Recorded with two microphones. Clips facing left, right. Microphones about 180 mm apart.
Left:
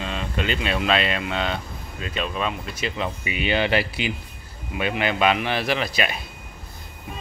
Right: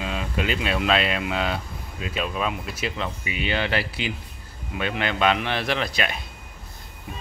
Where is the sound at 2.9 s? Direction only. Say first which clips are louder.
Left 2 dB; 15° left (ahead or behind).